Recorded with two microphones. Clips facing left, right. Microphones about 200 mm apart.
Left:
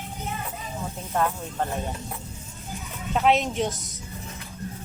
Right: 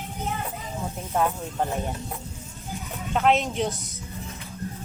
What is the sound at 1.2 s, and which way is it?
Speech, 5° right (ahead or behind).